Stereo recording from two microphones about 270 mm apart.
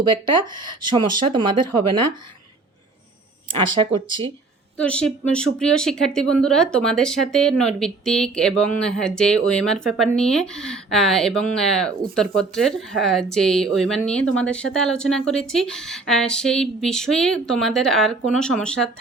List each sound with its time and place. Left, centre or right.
0.5 s speech: right
0.9 s speech: centre
3.8 s speech: centre
4.8 s speech: centre